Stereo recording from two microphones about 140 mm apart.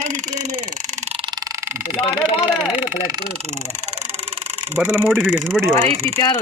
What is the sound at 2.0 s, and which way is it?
Speech, 40° left (ahead or behind).